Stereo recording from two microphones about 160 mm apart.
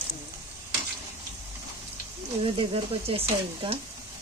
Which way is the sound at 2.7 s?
35° right (ahead or behind).